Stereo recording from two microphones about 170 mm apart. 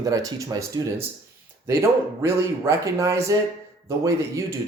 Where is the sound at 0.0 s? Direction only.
20° right (ahead or behind).